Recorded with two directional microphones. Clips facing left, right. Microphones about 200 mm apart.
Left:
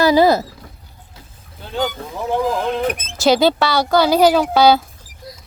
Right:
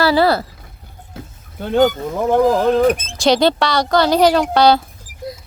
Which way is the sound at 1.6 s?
55° right (ahead or behind).